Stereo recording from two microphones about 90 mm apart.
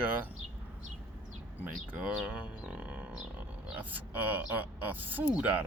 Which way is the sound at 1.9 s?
10° right (ahead or behind).